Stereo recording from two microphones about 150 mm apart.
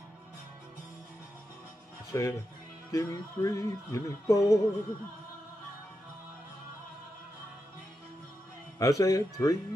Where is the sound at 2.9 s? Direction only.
20° left (ahead or behind).